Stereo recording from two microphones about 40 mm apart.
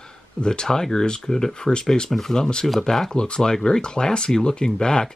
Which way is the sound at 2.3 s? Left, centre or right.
Centre.